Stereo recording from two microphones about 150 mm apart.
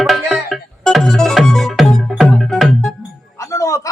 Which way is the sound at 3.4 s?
20° left (ahead or behind).